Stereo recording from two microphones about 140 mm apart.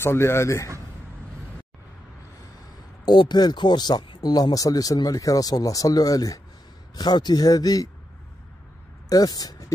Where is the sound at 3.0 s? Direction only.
30° left (ahead or behind).